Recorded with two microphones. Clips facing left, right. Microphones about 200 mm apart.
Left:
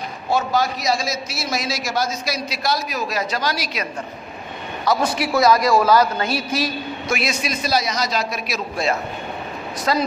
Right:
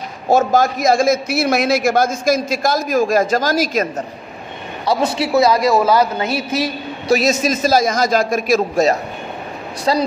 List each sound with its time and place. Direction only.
0.3 s a man's voice: 45° right (ahead or behind)
4.8 s a man's voice: 25° right (ahead or behind)
7.4 s a man's voice: 45° right (ahead or behind)
9.9 s a man's voice: 25° right (ahead or behind)